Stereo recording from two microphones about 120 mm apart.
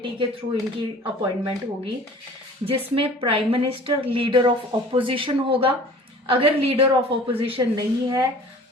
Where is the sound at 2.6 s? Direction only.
50° right (ahead or behind).